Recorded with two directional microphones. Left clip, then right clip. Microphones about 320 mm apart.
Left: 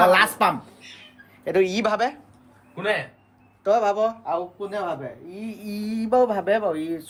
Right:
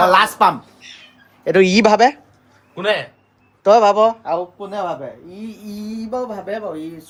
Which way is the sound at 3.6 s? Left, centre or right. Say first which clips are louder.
Right 9 dB; right.